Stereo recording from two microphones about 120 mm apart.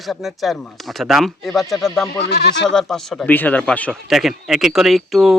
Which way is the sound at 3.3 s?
15° left (ahead or behind).